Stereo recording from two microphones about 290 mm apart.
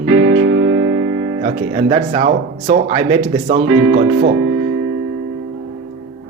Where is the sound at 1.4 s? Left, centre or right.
Right.